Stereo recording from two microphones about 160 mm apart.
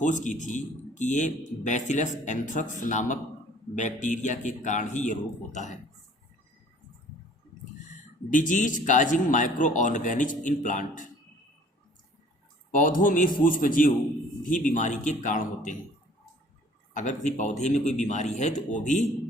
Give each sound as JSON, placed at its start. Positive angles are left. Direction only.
{"t": 0.0, "sound": "speech", "side_deg": 50}
{"t": 8.3, "sound": "speech", "side_deg": 55}
{"t": 12.7, "sound": "a man's voice", "side_deg": 55}
{"t": 17.0, "sound": "speech", "side_deg": 50}